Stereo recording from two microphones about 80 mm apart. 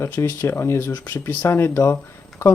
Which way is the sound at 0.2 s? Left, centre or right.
Left.